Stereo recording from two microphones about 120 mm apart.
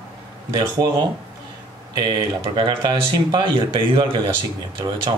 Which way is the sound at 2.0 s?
40° right (ahead or behind).